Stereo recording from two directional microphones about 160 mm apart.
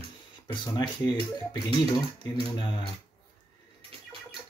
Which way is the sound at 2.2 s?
30° left (ahead or behind).